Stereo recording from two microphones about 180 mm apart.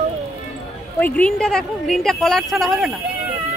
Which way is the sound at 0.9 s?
10° left (ahead or behind).